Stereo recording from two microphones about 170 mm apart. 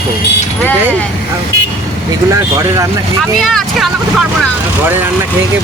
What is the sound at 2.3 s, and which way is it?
Speech, 20° right (ahead or behind).